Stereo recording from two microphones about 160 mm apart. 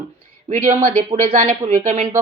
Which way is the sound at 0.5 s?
45° right (ahead or behind).